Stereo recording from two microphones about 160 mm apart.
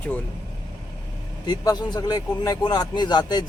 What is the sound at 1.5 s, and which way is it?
Speech, 25° left (ahead or behind).